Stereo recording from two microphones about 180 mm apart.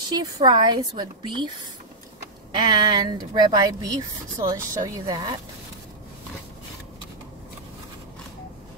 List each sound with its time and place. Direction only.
0.2 s speech: 25° right (ahead or behind)
2.5 s speech: 20° right (ahead or behind)